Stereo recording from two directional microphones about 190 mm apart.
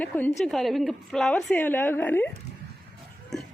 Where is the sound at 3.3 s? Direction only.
5° left (ahead or behind).